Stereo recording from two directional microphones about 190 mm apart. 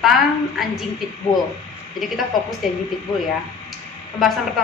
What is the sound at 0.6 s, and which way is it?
Speech, centre (ahead or behind).